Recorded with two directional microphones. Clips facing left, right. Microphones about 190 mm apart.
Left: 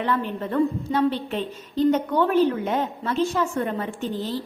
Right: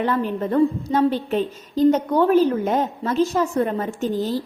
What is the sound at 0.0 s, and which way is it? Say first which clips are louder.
A woman's voice: right 4 dB; 40° right (ahead or behind).